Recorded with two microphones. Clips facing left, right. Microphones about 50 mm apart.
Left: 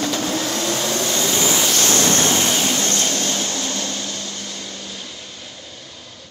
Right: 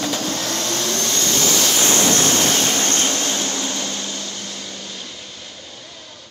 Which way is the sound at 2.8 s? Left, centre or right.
Right.